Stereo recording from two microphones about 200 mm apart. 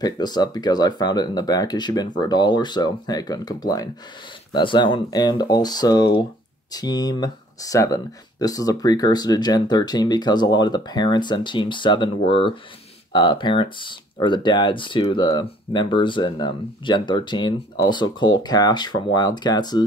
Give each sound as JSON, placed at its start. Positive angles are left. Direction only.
{"t": 0.0, "sound": "speech", "side_deg": 20}